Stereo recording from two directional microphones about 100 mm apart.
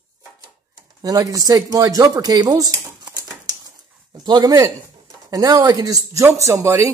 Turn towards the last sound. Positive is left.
turn(degrees=-30)  # may be behind; listen again after turning